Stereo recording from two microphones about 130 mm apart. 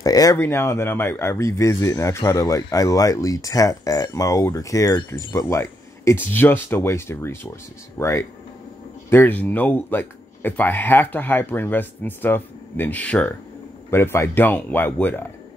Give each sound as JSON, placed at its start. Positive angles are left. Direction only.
{"t": 0.0, "sound": "speech", "side_deg": 30}